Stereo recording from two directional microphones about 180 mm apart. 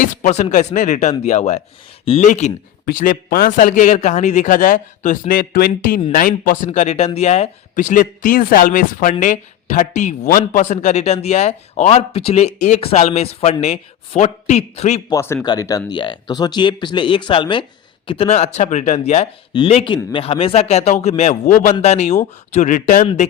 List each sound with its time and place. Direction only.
0.0 s a man's voice: 45° left (ahead or behind)
2.8 s a man's voice: 50° left (ahead or behind)
15.1 s speech: 15° left (ahead or behind); by 23.0 s 45° left (ahead or behind)